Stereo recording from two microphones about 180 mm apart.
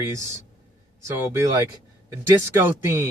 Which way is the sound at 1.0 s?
15° right (ahead or behind).